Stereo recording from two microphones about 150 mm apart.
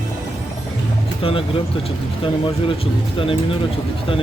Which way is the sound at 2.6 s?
35° left (ahead or behind).